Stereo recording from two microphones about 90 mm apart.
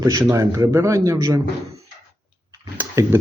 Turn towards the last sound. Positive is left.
turn(degrees=-35)  # may be behind; listen again after turning